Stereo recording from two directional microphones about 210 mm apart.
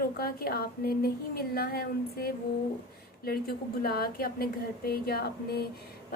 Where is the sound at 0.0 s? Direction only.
45° left (ahead or behind).